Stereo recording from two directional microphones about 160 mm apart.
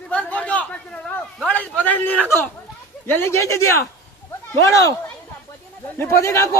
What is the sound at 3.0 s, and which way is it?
Speech, 15° left (ahead or behind).